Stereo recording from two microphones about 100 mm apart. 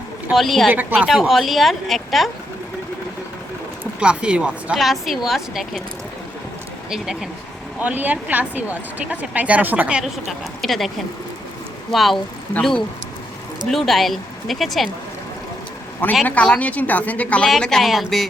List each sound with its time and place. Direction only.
0.3 s a woman's voice: centre (ahead or behind)
0.7 s a woman's voice: 20° right (ahead or behind)
0.9 s a woman's voice: centre (ahead or behind)
4.0 s a woman's voice: 10° right (ahead or behind)
6.9 s a woman's voice: 5° right (ahead or behind)
7.8 s speech: 15° right (ahead or behind)
10.0 s a woman's voice: centre (ahead or behind)
13.7 s a woman's voice: centre (ahead or behind)
16.2 s a woman's voice: 15° left (ahead or behind)